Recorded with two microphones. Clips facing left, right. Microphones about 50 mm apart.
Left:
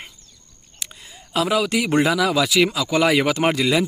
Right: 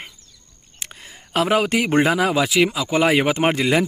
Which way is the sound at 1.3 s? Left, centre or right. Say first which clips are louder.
Right 2 dB; right.